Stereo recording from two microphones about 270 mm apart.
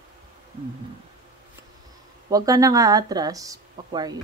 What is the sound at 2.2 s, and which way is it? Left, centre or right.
Speech, centre.